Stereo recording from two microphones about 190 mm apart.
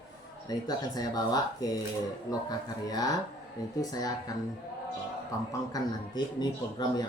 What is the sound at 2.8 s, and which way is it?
A man's voice, 20° left (ahead or behind).